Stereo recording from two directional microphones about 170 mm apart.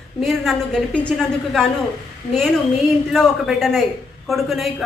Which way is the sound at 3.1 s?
Centre (ahead or behind).